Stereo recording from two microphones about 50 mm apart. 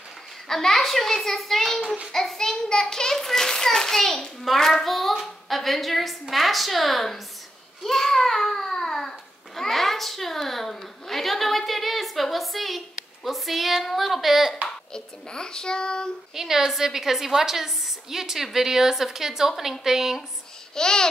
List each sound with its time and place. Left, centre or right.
0.5 s a child's voice: centre
14.9 s a child's voice: centre
16.3 s a woman's voice: centre
20.7 s a child's voice: centre